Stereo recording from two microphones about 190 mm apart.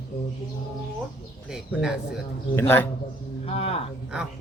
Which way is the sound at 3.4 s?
30° left (ahead or behind).